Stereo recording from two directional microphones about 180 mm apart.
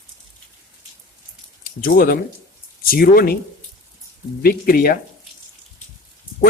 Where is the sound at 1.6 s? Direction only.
50° left (ahead or behind).